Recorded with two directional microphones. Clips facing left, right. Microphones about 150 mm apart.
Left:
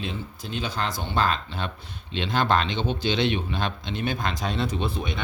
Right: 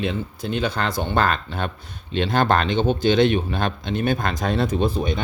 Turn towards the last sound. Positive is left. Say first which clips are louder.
# right 7 dB
turn(degrees=-40)  # may be behind; listen again after turning